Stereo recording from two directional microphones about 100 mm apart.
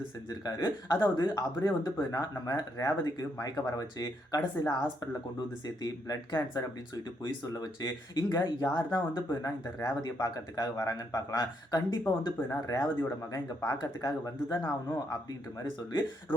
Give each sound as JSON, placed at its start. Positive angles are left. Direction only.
{"t": 0.4, "sound": "speech", "side_deg": 40}